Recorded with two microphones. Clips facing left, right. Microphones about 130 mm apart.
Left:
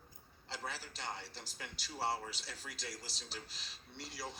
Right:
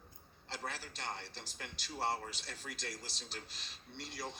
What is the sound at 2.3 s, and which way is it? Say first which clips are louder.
Speech: right 2 dB; 50° right (ahead or behind).